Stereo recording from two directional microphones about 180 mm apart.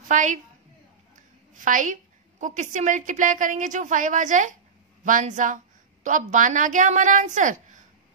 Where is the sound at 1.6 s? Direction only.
45° right (ahead or behind).